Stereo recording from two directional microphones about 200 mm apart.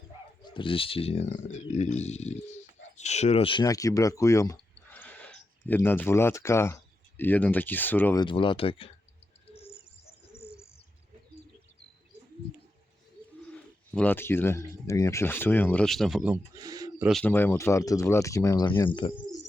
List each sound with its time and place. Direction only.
0.5 s speech: 25° left (ahead or behind)
4.9 s a sound: 5° left (ahead or behind)
7.2 s speech: 10° left (ahead or behind)
8.2 s speech: 25° left (ahead or behind)
9.5 s bird: 30° left (ahead or behind)
13.4 s speech: 5° left (ahead or behind)
16.6 s bird: 20° right (ahead or behind)
17.1 s speech: 5° left (ahead or behind); by 19.2 s 25° left (ahead or behind)